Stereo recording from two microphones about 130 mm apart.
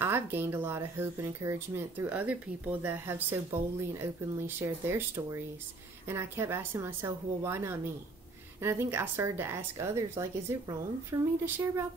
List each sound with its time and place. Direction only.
0.0 s a woman's voice: 15° right (ahead or behind)